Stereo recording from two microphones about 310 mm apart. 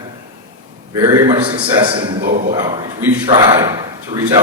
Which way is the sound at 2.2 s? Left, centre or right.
Right.